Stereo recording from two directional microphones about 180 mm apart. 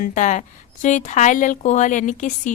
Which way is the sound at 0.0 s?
45° left (ahead or behind).